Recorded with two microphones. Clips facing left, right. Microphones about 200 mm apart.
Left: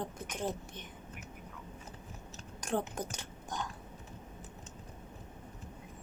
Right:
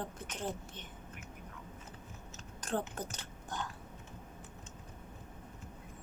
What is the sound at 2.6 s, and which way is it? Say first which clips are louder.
Biting: left 2 dB; 10° left (ahead or behind).